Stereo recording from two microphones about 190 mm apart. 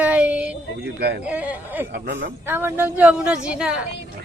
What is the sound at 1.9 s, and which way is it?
Speech, 70° right (ahead or behind).